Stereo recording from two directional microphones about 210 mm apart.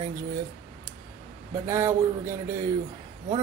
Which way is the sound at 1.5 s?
15° right (ahead or behind).